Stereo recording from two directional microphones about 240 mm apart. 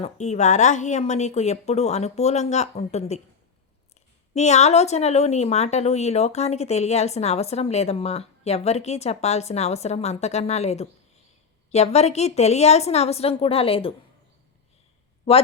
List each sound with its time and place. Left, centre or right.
0.0 s speech: left
4.4 s speech: left
15.3 s speech: left